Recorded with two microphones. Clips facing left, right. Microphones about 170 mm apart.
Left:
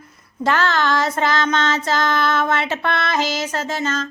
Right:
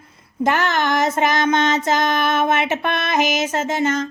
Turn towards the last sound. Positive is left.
turn(degrees=-20)  # may be behind; listen again after turning